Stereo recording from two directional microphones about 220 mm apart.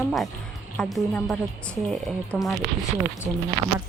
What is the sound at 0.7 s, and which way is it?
Speech, 5° left (ahead or behind).